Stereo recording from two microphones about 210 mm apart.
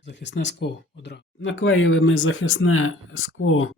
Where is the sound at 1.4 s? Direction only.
65° left (ahead or behind).